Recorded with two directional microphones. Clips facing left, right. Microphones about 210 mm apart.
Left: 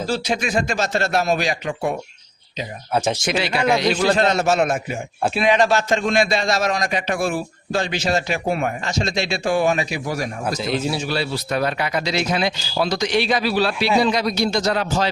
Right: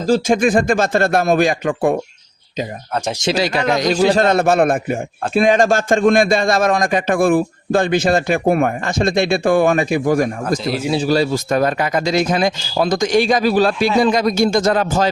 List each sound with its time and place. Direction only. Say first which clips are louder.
0.0 s a man's voice: right 8 dB; 45° right (ahead or behind)
3.3 s a man's voice: right 2 dB; 40° right (ahead or behind)
10.6 s speech: right 2 dB; 5° right (ahead or behind)
10.9 s a man's voice: right 8 dB; 40° right (ahead or behind)